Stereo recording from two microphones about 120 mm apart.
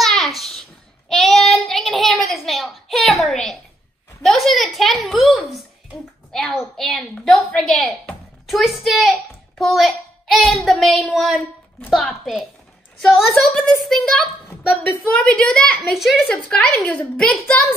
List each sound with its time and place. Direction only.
0.0 s child singing: centre (ahead or behind)
4.2 s a sound: centre (ahead or behind)
6.3 s a woman's voice: centre (ahead or behind)
16.4 s a woman's voice: 10° left (ahead or behind)